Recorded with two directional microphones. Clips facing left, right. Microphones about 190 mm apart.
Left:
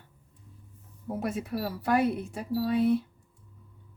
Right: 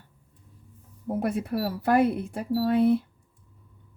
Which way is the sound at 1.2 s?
55° right (ahead or behind).